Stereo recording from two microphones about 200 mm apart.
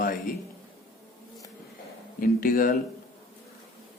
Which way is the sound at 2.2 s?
45° left (ahead or behind).